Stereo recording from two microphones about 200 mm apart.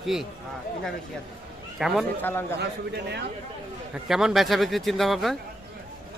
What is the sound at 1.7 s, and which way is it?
Speech, centre (ahead or behind).